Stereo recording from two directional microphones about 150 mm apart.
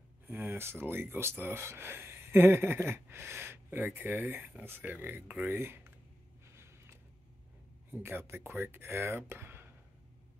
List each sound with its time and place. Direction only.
0.3 s speech: 15° right (ahead or behind)
6.5 s a sound: 15° right (ahead or behind)
7.9 s speech: 15° right (ahead or behind)